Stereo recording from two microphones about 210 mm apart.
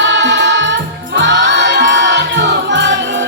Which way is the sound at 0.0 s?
60° right (ahead or behind).